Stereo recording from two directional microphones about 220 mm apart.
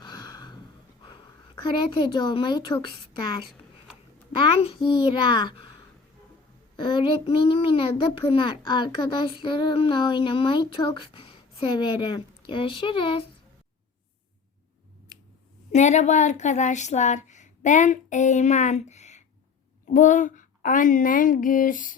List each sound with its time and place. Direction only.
0.0 s a sound: 20° left (ahead or behind)
1.0 s a woman's voice: 20° left (ahead or behind)
4.3 s a child's voice: 25° left (ahead or behind)
6.7 s a child's voice: 20° left (ahead or behind)
15.7 s speech: 30° left (ahead or behind)